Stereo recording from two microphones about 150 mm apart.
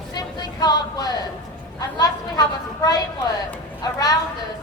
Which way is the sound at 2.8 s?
25° left (ahead or behind).